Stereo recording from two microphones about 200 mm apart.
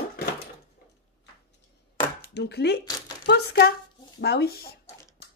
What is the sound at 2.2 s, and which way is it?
Speech, 55° left (ahead or behind).